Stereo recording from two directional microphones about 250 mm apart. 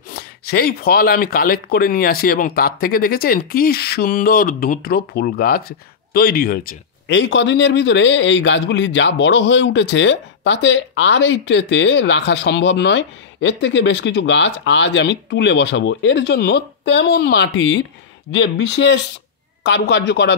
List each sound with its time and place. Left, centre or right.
0.1 s speech: left